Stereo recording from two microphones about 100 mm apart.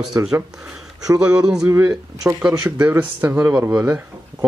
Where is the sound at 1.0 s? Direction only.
10° right (ahead or behind).